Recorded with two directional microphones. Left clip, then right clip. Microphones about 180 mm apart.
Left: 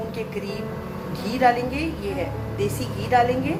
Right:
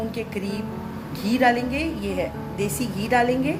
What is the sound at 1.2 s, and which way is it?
A woman's voice, 60° right (ahead or behind).